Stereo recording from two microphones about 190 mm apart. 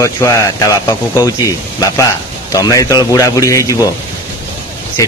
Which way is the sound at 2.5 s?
20° left (ahead or behind).